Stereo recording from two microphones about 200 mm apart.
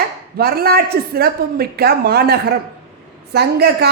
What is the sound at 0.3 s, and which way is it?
A woman's voice, 50° right (ahead or behind).